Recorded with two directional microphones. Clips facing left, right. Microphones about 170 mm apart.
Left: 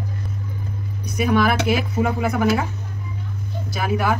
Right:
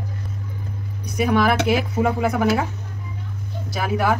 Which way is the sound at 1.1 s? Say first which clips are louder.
Even; 30° right (ahead or behind).